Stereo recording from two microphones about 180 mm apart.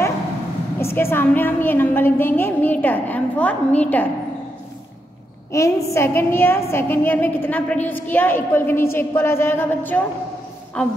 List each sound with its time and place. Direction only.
0.7 s a woman's voice: 15° left (ahead or behind)
5.5 s a woman's voice: 15° left (ahead or behind)